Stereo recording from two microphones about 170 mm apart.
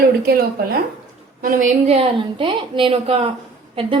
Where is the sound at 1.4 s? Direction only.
50° right (ahead or behind).